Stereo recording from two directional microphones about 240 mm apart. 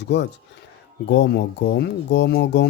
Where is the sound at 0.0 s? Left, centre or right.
Left.